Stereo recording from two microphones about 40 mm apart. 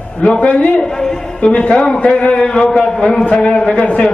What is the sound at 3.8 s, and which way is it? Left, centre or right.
Speech, left.